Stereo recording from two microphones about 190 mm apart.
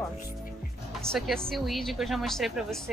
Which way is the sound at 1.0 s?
Centre (ahead or behind).